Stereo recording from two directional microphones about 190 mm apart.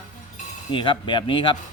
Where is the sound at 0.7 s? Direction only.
25° left (ahead or behind).